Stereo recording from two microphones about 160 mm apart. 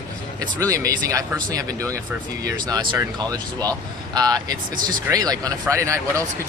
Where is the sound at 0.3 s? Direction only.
20° right (ahead or behind).